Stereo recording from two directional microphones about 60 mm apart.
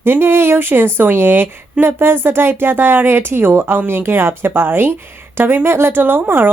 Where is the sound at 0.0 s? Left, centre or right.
Right.